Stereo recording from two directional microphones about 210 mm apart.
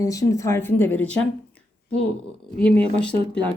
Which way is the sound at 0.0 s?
15° left (ahead or behind).